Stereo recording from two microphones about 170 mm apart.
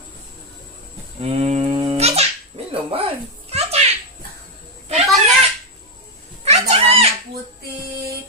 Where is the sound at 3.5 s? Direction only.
40° right (ahead or behind).